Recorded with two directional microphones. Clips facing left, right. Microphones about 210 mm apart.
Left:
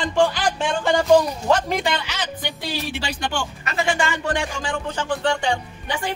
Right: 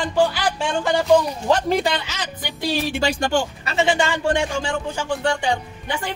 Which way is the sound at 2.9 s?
45° right (ahead or behind).